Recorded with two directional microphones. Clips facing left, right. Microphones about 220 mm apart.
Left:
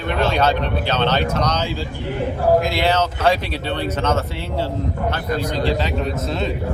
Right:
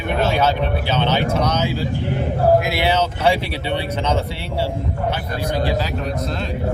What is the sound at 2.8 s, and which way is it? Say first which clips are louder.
Speech: even; 10° right (ahead or behind).